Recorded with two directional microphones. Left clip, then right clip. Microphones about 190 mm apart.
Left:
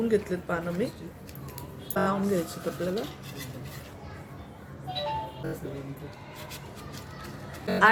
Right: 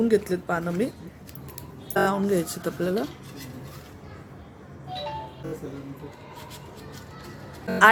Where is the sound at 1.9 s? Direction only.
55° right (ahead or behind).